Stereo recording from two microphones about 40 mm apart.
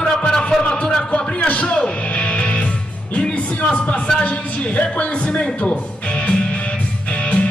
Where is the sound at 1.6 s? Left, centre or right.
Centre.